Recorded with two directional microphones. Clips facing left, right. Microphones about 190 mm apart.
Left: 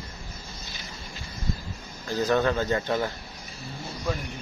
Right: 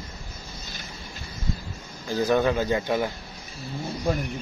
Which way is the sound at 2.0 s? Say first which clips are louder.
Right 2 dB; 15° right (ahead or behind).